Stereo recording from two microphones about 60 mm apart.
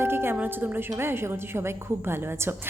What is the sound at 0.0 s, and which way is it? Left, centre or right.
A woman's voice, right.